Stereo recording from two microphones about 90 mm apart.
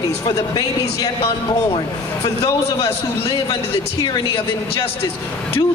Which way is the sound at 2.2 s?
45° left (ahead or behind).